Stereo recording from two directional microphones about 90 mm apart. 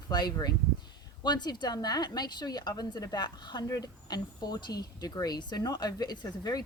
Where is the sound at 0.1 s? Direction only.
50° left (ahead or behind).